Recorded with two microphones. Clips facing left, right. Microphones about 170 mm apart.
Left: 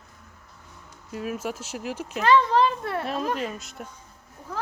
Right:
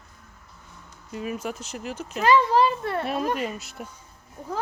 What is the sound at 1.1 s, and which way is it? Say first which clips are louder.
Speech: even; centre (ahead or behind).